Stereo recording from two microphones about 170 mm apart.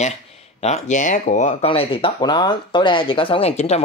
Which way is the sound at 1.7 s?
30° left (ahead or behind).